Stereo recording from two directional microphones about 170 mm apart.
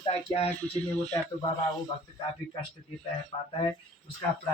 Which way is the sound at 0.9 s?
5° left (ahead or behind).